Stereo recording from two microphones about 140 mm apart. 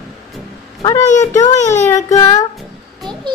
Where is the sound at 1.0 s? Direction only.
55° left (ahead or behind).